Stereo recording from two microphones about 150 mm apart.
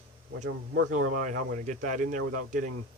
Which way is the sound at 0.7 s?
65° right (ahead or behind).